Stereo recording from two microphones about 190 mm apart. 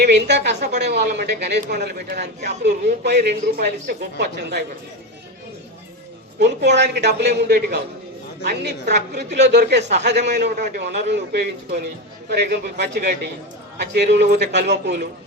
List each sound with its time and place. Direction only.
0.0 s a woman's voice: 65° right (ahead or behind)
6.4 s a woman's voice: 65° right (ahead or behind)